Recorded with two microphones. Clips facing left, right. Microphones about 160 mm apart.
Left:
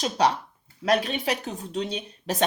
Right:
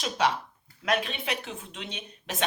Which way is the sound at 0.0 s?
40° left (ahead or behind).